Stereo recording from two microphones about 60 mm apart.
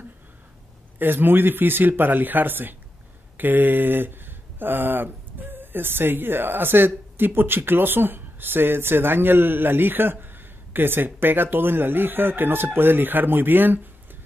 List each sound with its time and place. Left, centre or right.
0.9 s speech: right